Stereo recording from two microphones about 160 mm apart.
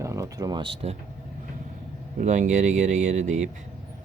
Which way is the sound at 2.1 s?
50° right (ahead or behind).